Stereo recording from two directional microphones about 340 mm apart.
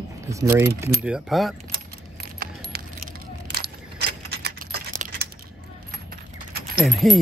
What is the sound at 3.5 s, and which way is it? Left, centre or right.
Keys jangling, right.